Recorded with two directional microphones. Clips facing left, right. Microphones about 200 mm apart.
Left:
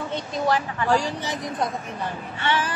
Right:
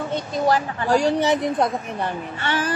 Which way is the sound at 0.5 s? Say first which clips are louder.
Right 2 dB; 40° right (ahead or behind).